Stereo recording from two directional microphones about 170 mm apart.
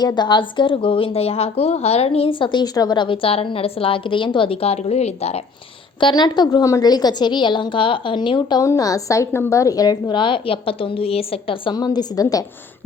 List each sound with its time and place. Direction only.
0.0 s a woman's voice: 25° left (ahead or behind)
6.0 s a woman's voice: 25° left (ahead or behind)